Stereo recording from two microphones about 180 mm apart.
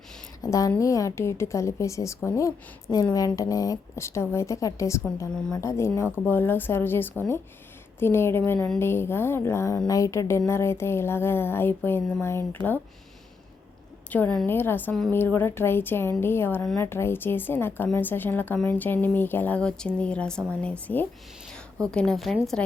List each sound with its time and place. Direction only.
0.4 s a woman's voice: 20° left (ahead or behind)
14.1 s a woman's voice: 10° left (ahead or behind)